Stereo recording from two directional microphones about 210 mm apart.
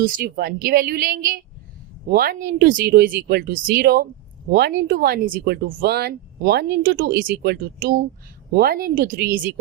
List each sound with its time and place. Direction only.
0.0 s speech: 40° right (ahead or behind)